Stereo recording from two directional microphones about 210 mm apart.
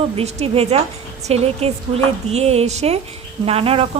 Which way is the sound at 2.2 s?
30° right (ahead or behind).